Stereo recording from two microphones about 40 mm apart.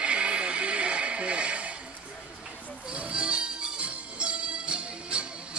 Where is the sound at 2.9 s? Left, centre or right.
Right.